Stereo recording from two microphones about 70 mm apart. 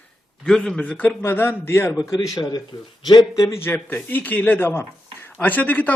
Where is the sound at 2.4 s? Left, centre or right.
Left.